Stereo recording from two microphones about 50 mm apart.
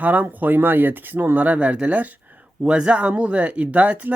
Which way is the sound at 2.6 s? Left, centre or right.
Centre.